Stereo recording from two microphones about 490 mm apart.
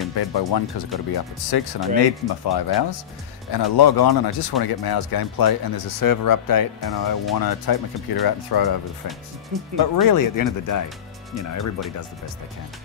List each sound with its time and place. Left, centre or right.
0.1 s speech: left